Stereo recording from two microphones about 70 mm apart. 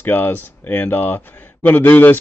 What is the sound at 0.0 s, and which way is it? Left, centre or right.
A man's voice, left.